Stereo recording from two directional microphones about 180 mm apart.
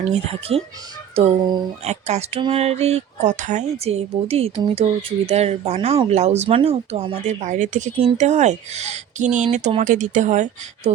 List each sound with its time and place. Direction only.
0.0 s speech: 35° right (ahead or behind)
1.8 s speech: 40° right (ahead or behind)